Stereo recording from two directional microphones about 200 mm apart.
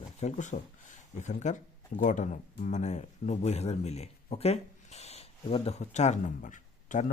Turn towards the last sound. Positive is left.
turn(degrees=40)  # may be behind; listen again after turning